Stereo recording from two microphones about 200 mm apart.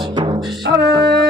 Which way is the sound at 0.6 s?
60° right (ahead or behind).